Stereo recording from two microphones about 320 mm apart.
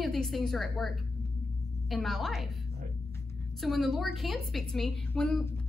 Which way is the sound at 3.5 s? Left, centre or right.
Centre.